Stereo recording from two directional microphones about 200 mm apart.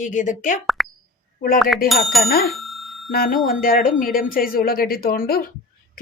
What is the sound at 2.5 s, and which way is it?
Bicycle bell, centre (ahead or behind).